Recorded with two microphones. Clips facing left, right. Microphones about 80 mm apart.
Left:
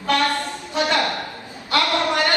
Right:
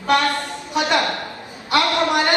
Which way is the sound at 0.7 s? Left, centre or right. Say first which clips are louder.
Right 2 dB; right.